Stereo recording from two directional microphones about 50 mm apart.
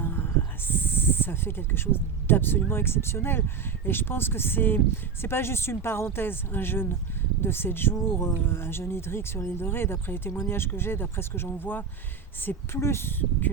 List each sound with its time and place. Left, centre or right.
0.0 s a sound: left
0.7 s speech: left
12.5 s speech: left